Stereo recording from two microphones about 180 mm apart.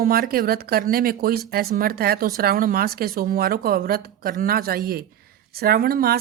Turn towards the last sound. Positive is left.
turn(degrees=-55)  # may be behind; listen again after turning